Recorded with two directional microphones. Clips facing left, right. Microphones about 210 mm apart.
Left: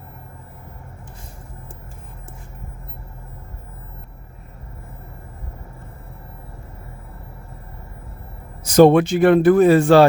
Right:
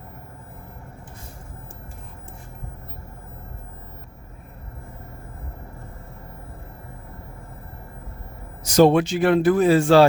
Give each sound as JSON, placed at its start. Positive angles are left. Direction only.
{"t": 8.6, "sound": "speech", "side_deg": 55}